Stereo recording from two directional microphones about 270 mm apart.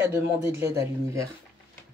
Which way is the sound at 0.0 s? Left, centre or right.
Centre.